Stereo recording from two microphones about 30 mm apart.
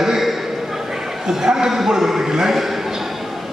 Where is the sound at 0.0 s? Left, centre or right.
Centre.